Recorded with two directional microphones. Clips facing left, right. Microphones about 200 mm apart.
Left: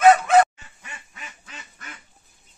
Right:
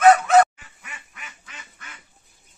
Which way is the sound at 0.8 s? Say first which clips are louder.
Left 1 dB; 30° left (ahead or behind).